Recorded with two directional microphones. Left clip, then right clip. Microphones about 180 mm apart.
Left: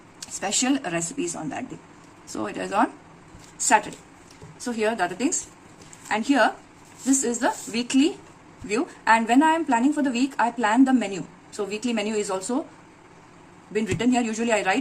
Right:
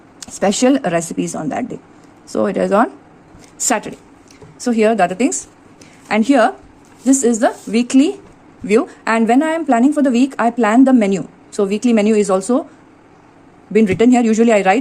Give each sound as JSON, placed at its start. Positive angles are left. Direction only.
{"t": 0.2, "sound": "a woman's voice", "side_deg": -45}
{"t": 4.6, "sound": "a woman's voice", "side_deg": -50}
{"t": 13.7, "sound": "a woman's voice", "side_deg": -50}